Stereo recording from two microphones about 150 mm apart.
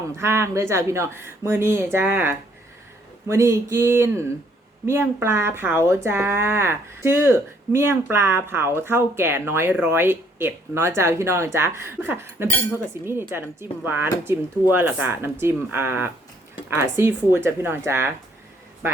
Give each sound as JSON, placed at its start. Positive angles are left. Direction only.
{"t": 0.2, "sound": "speech", "side_deg": -15}